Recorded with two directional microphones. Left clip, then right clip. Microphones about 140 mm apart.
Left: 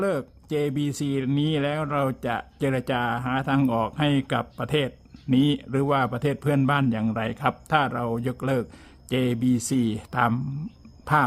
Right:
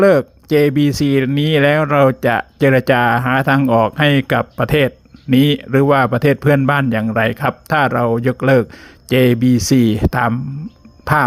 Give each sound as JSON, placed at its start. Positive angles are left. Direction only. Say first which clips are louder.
{"t": 0.0, "sound": "speech", "louder": "right 15 dB", "side_deg": -30}